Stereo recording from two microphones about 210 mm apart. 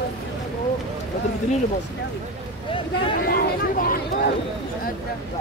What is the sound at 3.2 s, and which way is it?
Speech, 45° left (ahead or behind).